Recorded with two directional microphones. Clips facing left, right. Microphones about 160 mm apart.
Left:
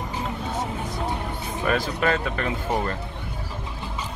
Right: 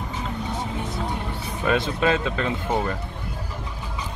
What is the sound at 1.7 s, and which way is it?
Speech, 20° right (ahead or behind).